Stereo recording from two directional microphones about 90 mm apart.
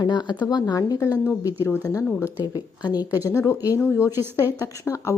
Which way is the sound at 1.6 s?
25° left (ahead or behind).